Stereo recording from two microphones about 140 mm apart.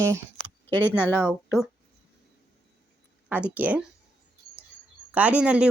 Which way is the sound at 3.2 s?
10° right (ahead or behind).